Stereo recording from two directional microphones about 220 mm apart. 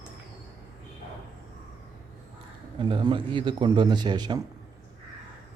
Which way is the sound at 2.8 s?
20° right (ahead or behind).